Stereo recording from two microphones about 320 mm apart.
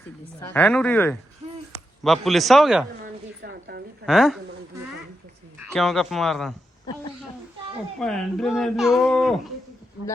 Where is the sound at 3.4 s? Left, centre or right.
Right.